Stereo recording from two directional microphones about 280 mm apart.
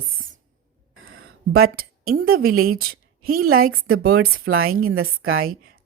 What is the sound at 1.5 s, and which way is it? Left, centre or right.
Speech, right.